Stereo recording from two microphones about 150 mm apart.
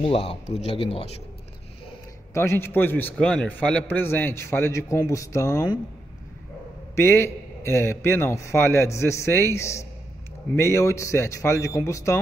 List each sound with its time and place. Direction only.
0.0 s speech: 40° left (ahead or behind)
2.3 s a man's voice: 20° left (ahead or behind)
7.0 s a man's voice: 15° left (ahead or behind)